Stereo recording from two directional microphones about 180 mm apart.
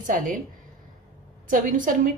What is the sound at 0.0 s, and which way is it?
Speech, 45° right (ahead or behind).